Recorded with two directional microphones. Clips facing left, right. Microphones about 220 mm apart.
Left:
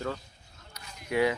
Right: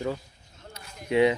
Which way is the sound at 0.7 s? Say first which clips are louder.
Right 5 dB; 20° right (ahead or behind).